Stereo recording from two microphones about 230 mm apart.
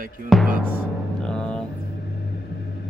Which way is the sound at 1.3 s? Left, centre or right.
Centre.